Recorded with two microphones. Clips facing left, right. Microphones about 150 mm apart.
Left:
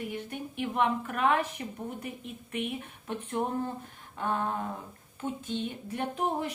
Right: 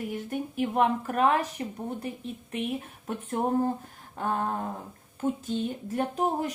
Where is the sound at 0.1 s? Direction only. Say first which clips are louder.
Right 5 dB; 40° right (ahead or behind).